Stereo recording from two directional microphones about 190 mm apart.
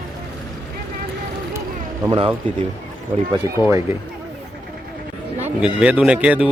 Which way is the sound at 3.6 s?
15° right (ahead or behind).